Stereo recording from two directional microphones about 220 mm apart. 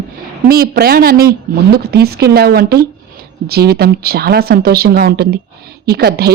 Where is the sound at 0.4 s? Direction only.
40° right (ahead or behind).